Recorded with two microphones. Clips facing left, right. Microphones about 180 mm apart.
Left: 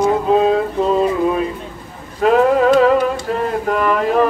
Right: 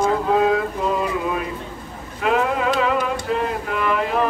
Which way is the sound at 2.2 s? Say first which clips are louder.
Left 8 dB; 40° left (ahead or behind).